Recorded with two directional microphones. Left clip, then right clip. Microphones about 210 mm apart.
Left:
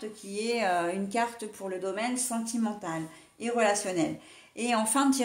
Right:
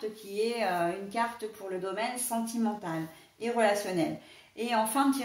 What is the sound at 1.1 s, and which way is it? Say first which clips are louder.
Speech: left 1 dB; 50° left (ahead or behind).